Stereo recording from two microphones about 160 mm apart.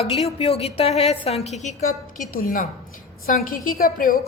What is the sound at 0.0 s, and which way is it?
A woman's voice, 40° left (ahead or behind).